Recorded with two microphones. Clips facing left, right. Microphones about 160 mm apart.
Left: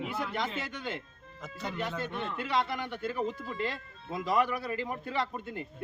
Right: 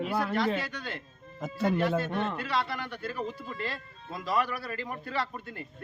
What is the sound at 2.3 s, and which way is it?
Speech, 20° left (ahead or behind).